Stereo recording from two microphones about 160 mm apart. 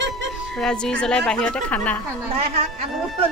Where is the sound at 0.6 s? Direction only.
5° left (ahead or behind).